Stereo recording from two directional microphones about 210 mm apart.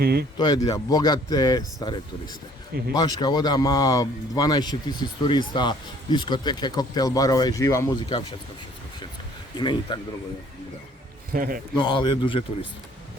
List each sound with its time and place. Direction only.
0.0 s a man's voice: 50° right (ahead or behind)
0.3 s a man's voice: 20° left (ahead or behind)
9.6 s a man's voice: 20° left (ahead or behind)
11.3 s a man's voice: 40° right (ahead or behind)
11.8 s a man's voice: 20° left (ahead or behind)